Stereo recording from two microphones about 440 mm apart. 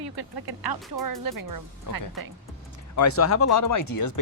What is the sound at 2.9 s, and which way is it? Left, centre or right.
Speech, left.